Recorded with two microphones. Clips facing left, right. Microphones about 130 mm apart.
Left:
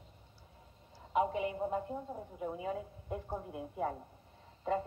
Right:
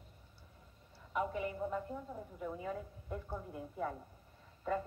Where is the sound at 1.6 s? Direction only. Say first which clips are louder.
Left 3 dB; 35° left (ahead or behind).